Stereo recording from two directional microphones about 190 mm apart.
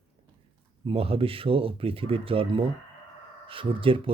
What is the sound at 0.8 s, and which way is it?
Speech, 30° right (ahead or behind).